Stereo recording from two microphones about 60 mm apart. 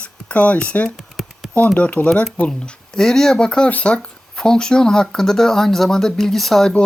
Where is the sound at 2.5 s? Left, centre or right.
Centre.